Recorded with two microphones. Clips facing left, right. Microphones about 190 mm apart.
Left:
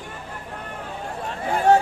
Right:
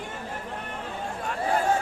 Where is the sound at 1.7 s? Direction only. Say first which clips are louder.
Left 12 dB; 70° left (ahead or behind).